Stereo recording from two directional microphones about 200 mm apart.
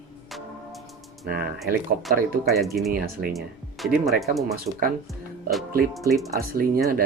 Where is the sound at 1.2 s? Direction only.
50° right (ahead or behind).